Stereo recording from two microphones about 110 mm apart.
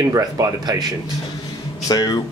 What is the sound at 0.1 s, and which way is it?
Speech, 35° right (ahead or behind).